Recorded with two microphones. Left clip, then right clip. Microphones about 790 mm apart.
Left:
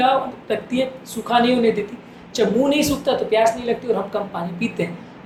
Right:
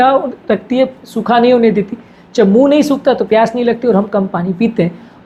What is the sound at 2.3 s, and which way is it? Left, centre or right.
A woman's voice, right.